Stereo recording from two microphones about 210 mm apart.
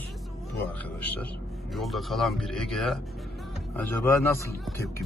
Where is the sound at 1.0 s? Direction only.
5° left (ahead or behind).